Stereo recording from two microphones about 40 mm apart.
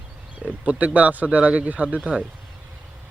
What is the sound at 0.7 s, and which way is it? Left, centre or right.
Speech, right.